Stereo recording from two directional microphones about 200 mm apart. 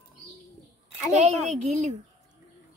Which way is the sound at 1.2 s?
35° right (ahead or behind).